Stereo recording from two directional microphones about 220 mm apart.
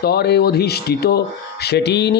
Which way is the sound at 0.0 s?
50° left (ahead or behind).